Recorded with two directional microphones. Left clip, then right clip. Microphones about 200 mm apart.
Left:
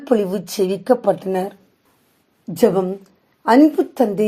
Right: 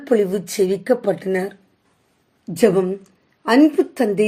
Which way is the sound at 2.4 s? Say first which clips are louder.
Even; 10° left (ahead or behind).